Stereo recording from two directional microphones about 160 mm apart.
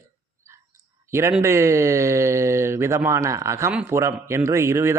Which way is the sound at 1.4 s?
15° right (ahead or behind).